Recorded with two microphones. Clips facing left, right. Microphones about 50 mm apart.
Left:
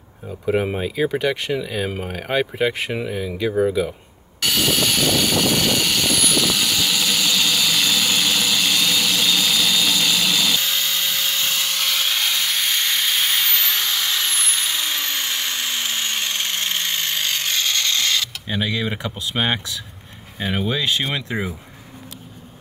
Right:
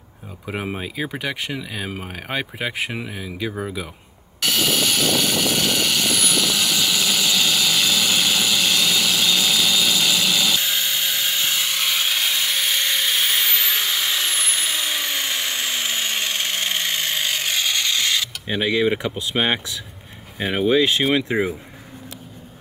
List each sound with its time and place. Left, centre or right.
0.5 s speech: centre
4.4 s vehicle: centre
20.3 s speech: centre